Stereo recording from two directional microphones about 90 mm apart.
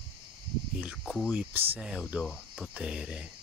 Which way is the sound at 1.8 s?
5° right (ahead or behind).